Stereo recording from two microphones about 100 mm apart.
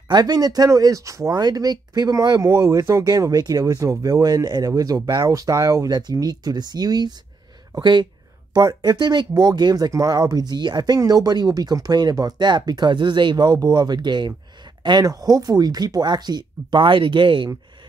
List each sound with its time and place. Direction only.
0.1 s speech: 40° right (ahead or behind)